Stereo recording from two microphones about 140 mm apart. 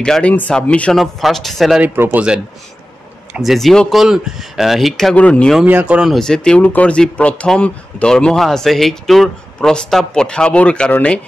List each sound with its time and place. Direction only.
0.0 s speech: 5° left (ahead or behind)
1.8 s speech: 15° right (ahead or behind); by 5.6 s 5° left (ahead or behind)
5.6 s speech: 10° right (ahead or behind); by 11.1 s 10° left (ahead or behind)